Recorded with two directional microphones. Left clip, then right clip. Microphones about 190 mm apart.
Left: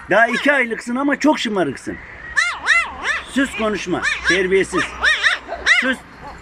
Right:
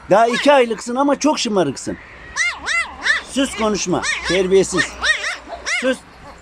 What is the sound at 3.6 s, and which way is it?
Speech, 15° right (ahead or behind).